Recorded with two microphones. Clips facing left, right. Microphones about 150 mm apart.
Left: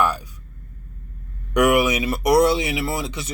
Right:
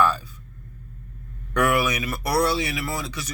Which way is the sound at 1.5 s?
20° left (ahead or behind).